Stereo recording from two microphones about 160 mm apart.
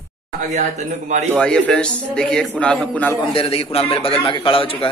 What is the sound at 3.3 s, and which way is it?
A man's voice, 35° left (ahead or behind).